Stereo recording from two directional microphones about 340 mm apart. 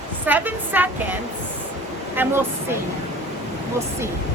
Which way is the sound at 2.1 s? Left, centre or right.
Centre.